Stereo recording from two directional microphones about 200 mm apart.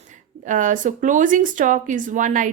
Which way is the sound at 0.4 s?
40° right (ahead or behind).